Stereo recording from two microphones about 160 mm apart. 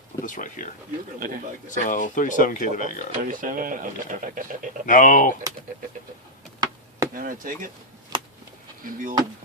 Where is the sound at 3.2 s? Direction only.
55° right (ahead or behind).